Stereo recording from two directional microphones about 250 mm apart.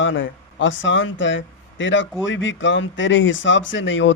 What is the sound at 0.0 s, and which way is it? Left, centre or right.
Speech, left.